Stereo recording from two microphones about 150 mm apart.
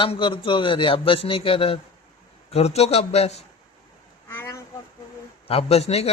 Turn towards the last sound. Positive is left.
turn(degrees=45)  # may be behind; listen again after turning